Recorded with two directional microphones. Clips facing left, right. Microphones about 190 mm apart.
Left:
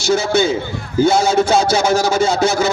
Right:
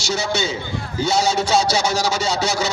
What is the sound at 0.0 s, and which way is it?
A man's voice, 55° left (ahead or behind).